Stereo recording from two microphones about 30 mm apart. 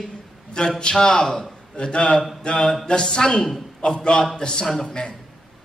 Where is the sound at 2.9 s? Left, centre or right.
Left.